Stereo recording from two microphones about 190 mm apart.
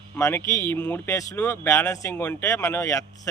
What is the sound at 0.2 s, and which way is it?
Speech, 15° left (ahead or behind).